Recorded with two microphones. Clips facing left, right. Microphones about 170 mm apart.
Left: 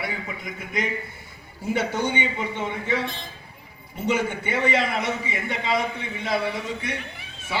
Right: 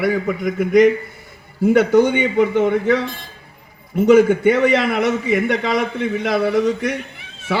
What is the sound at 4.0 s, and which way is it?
A man's voice, 70° right (ahead or behind).